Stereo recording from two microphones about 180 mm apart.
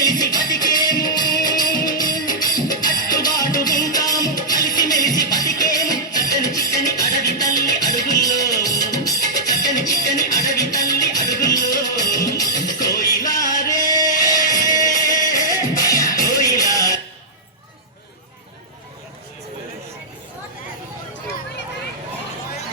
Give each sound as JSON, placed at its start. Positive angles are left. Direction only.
{"t": 0.0, "sound": "music", "side_deg": 20}